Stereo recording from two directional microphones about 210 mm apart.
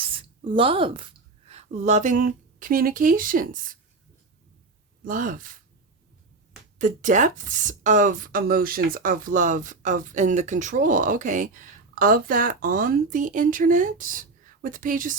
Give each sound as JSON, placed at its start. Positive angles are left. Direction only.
{"t": 0.0, "sound": "a sound", "side_deg": -25}
{"t": 1.5, "sound": "speech", "side_deg": -30}
{"t": 5.0, "sound": "speech", "side_deg": -40}
{"t": 6.7, "sound": "speech", "side_deg": -40}